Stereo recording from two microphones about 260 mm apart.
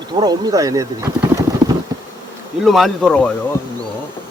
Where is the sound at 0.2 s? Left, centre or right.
Centre.